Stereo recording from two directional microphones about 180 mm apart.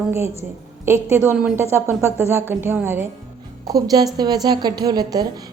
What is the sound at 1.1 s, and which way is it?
A woman's voice, 10° right (ahead or behind).